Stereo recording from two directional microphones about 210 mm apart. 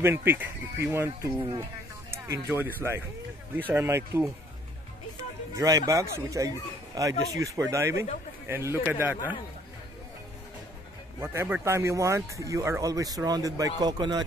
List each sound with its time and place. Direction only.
0.0 s speech: 10° right (ahead or behind)
5.6 s speech: 15° right (ahead or behind)
11.1 s speech: 10° right (ahead or behind)